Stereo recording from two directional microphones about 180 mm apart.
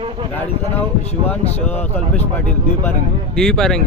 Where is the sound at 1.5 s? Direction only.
10° left (ahead or behind).